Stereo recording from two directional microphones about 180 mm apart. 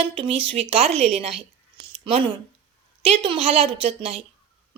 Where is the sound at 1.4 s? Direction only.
30° right (ahead or behind).